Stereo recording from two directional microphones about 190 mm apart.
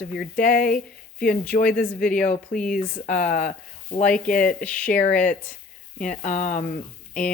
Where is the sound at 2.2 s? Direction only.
40° left (ahead or behind).